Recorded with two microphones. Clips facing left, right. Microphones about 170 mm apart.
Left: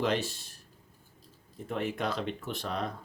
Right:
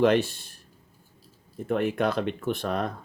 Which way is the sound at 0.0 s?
60° right (ahead or behind).